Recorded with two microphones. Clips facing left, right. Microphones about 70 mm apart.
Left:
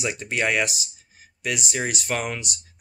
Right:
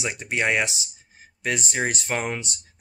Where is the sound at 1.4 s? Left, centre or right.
Right.